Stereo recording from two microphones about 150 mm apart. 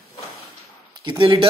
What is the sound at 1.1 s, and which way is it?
Speech, 30° right (ahead or behind).